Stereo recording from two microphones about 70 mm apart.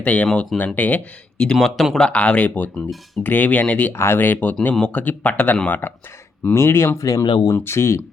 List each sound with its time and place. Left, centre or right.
0.0 s speech: left
1.5 s speech: centre
2.0 s speech: centre
3.9 s speech: left
6.5 s speech: left
7.0 s speech: left
7.5 s speech: left